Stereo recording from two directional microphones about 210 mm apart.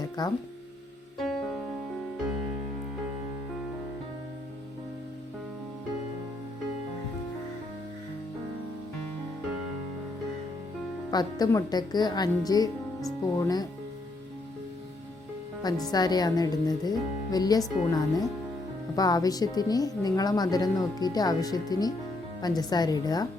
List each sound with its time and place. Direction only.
0.2 s a woman's voice: 20° left (ahead or behind)
1.2 s music: centre (ahead or behind)
11.1 s a woman's voice: 20° left (ahead or behind)
15.6 s a woman's voice: 20° left (ahead or behind)